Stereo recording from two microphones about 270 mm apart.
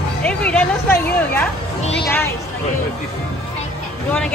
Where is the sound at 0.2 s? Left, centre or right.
Centre.